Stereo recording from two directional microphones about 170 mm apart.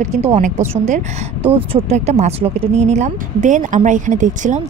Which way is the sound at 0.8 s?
40° right (ahead or behind).